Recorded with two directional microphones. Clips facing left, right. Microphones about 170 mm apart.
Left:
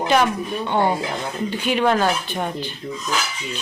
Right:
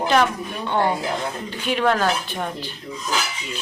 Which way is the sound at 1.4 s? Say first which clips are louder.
Left 2 dB; centre (ahead or behind).